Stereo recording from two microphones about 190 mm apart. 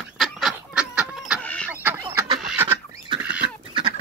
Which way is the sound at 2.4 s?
5° right (ahead or behind).